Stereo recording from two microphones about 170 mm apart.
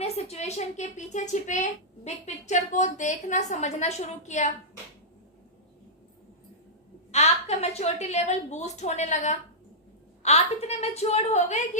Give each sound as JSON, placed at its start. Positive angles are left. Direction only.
{"t": 0.0, "sound": "speech", "side_deg": 40}
{"t": 7.1, "sound": "a woman's voice", "side_deg": 40}